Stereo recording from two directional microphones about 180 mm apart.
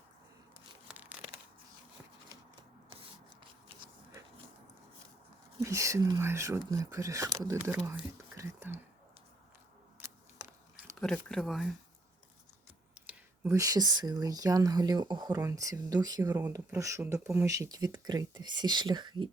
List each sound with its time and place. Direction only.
5.5 s speech: 15° right (ahead or behind)
10.9 s speech: 5° left (ahead or behind)
13.1 s speech: 10° right (ahead or behind)